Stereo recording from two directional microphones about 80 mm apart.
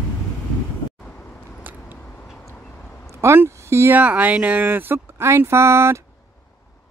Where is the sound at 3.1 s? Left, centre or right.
Right.